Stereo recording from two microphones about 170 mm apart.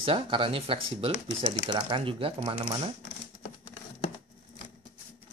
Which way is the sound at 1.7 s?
25° right (ahead or behind).